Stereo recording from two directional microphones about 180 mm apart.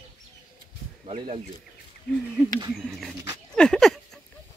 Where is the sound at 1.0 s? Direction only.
30° right (ahead or behind).